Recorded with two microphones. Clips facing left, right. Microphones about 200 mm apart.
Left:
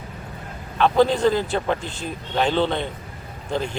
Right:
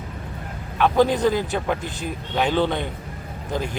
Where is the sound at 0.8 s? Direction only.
10° right (ahead or behind).